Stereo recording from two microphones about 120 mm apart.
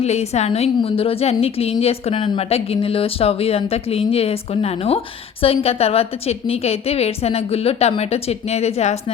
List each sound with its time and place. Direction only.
0.0 s a woman's voice: 65° left (ahead or behind)
0.8 s a woman's voice: 50° left (ahead or behind)